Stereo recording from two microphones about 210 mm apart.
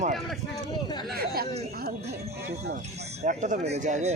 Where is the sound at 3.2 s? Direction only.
35° right (ahead or behind).